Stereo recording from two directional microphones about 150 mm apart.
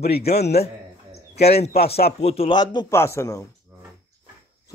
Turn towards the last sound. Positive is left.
turn(degrees=20)  # may be behind; listen again after turning